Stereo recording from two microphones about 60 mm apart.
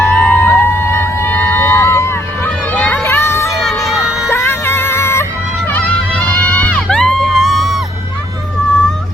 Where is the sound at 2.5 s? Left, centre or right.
Centre.